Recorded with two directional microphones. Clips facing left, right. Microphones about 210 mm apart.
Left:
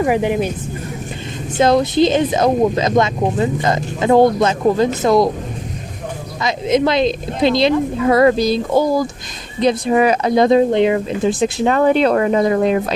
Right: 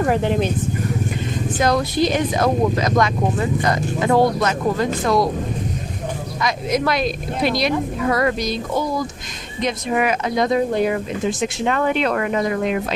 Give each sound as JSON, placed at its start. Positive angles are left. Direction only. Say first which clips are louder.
{"t": 0.0, "sound": "speech", "louder": "left 2 dB", "side_deg": 10}
{"t": 1.5, "sound": "speech", "louder": "left 6 dB", "side_deg": 25}
{"t": 6.4, "sound": "speech", "louder": "left 5 dB", "side_deg": 25}